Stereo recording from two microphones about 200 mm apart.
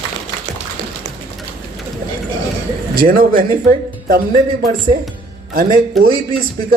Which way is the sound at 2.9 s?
50° right (ahead or behind).